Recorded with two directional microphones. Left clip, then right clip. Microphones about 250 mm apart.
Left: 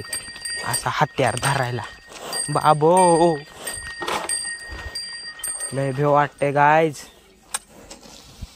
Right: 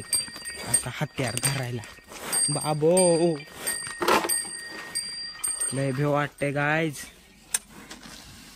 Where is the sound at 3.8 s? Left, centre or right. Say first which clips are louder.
Right 4 dB; left.